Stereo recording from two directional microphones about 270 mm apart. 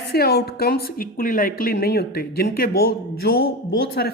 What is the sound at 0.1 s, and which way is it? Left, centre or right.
Speech, left.